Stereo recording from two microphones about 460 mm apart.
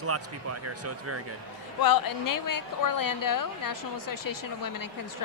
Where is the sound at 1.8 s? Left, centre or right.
Left.